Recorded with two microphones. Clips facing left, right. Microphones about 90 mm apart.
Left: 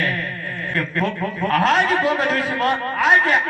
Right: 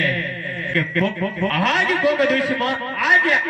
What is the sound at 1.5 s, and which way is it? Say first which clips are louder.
Speech: left 4 dB; 35° left (ahead or behind).